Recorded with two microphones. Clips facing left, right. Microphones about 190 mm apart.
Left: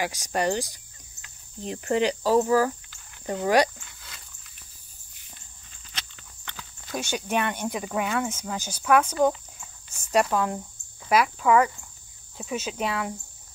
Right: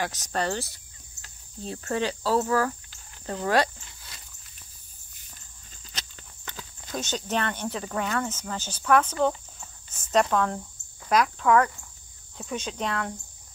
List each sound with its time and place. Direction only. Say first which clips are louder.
0.0 s speech: left 3 dB; 10° left (ahead or behind)
5.9 s walk: even; 40° right (ahead or behind)
6.9 s speech: left 2 dB; 10° left (ahead or behind)
9.8 s a sound: even; 10° left (ahead or behind)
11.1 s speech: left 1 dB; 5° left (ahead or behind)